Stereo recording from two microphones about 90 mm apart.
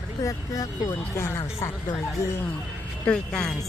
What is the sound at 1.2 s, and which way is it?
Speech, 30° left (ahead or behind).